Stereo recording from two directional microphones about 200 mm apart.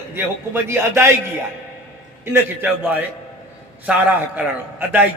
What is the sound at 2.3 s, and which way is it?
A man's voice, 10° right (ahead or behind).